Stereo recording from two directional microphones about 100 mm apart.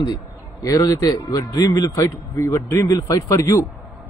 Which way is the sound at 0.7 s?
35° left (ahead or behind).